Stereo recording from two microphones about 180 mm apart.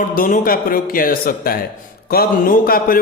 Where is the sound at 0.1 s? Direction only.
45° left (ahead or behind).